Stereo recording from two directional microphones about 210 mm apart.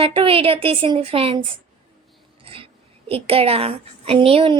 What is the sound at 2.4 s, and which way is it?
A woman's voice, 25° right (ahead or behind).